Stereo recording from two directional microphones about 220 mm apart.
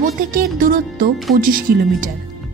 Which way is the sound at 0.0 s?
40° right (ahead or behind).